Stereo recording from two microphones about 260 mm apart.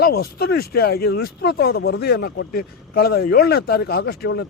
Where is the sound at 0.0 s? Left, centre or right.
Left.